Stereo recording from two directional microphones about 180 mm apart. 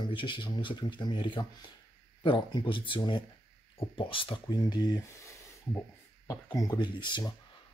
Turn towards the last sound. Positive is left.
turn(degrees=25)  # may be behind; listen again after turning